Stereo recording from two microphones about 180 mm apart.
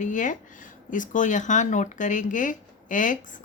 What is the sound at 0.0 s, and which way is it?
Speech, 45° left (ahead or behind).